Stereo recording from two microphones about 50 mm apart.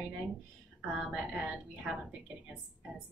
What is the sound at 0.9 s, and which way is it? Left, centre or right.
A woman's voice, right.